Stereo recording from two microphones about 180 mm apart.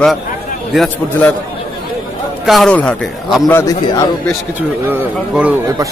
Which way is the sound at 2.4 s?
Centre (ahead or behind).